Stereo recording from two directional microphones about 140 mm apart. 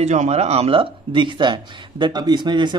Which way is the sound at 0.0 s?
55° right (ahead or behind).